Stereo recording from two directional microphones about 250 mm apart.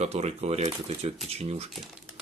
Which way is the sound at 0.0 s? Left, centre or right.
Right.